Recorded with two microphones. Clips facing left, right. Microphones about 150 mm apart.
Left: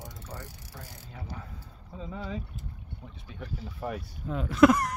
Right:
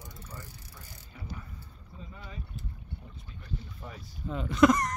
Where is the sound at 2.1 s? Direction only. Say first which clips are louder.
Left 11 dB; 90° left.